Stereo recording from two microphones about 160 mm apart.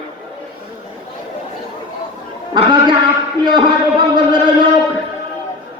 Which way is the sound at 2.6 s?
30° right (ahead or behind).